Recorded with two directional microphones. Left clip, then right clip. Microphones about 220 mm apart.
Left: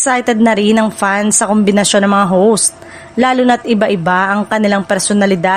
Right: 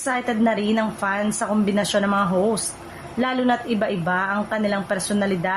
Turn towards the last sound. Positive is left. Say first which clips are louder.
# left 11 dB
turn(degrees=45)  # may be behind; listen again after turning